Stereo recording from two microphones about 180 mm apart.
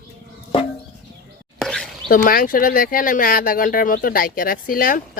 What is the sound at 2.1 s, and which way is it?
Speech, 55° left (ahead or behind).